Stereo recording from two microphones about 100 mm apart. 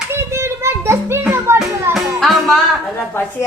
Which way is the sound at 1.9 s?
Centre (ahead or behind).